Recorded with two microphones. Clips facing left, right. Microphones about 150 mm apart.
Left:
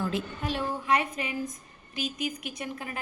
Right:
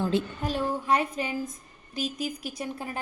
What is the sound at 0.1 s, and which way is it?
A woman's voice, 30° right (ahead or behind).